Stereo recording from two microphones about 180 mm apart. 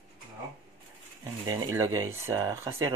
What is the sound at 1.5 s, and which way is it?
Speech, 15° right (ahead or behind).